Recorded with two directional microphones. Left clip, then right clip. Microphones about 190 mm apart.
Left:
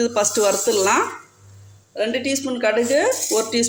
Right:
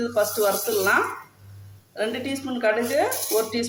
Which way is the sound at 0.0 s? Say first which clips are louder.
Left 4 dB; 45° left (ahead or behind).